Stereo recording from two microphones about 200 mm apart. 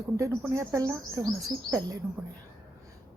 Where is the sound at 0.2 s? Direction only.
15° right (ahead or behind).